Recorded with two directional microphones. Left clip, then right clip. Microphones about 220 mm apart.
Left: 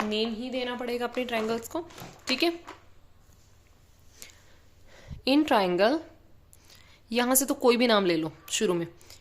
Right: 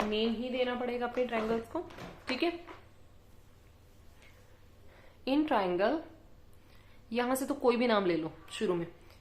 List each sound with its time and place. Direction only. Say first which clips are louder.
0.1 s a woman's voice: left 3 dB; 45° left (ahead or behind)
2.3 s a woman's voice: left 7 dB; 30° left (ahead or behind)
4.2 s a sound: left 11 dB; 55° left (ahead or behind)
4.9 s a woman's voice: left 7 dB; 45° left (ahead or behind)